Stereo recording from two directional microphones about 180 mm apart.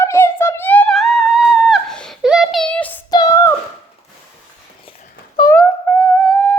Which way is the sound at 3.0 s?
20° left (ahead or behind).